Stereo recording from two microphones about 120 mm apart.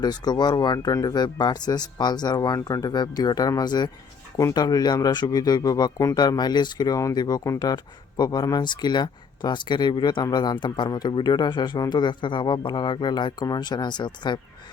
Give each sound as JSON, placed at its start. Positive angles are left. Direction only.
{"t": 0.0, "sound": "speech", "side_deg": 35}